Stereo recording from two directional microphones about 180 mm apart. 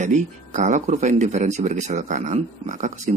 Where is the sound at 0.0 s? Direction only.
45° right (ahead or behind).